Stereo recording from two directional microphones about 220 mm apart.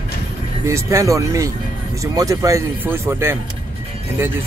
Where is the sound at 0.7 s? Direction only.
15° right (ahead or behind).